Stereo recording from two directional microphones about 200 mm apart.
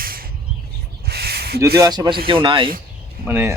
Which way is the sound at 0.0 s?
45° right (ahead or behind).